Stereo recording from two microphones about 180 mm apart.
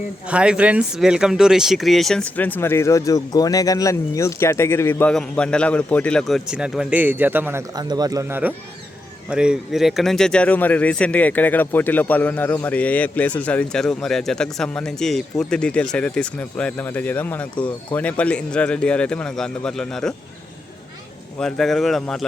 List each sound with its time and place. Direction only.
0.3 s speech: 5° right (ahead or behind)
7.8 s speech: 20° right (ahead or behind); by 20.1 s 5° left (ahead or behind)
21.3 s speech: 5° left (ahead or behind)